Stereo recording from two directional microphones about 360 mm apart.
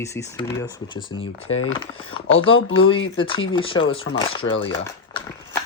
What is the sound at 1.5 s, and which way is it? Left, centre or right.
Speech, left.